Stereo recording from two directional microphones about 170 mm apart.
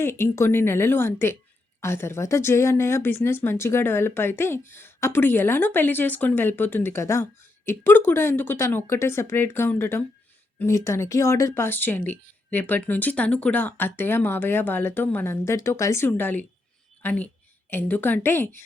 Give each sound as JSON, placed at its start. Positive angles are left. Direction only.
{"t": 0.0, "sound": "speech", "side_deg": 15}